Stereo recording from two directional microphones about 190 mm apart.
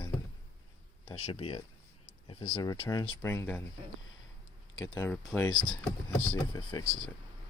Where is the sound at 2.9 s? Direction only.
15° left (ahead or behind).